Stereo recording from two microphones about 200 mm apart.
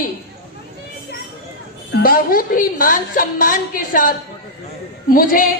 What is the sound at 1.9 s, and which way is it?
A woman's voice, 45° left (ahead or behind).